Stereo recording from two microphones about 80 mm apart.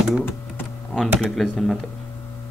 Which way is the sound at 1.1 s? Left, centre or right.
Centre.